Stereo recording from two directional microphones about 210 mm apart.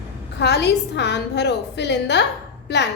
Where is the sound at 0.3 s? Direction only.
55° left (ahead or behind).